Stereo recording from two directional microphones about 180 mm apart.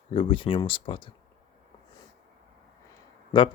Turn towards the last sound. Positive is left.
turn(degrees=25)  # may be behind; listen again after turning